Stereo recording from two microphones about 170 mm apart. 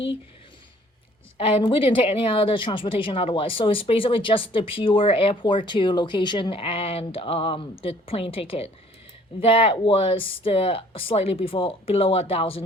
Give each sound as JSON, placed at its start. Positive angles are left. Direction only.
{"t": 1.4, "sound": "speech", "side_deg": 30}